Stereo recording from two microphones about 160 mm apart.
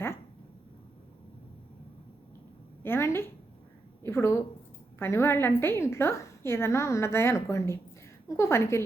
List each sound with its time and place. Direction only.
2.8 s a woman's voice: 15° left (ahead or behind)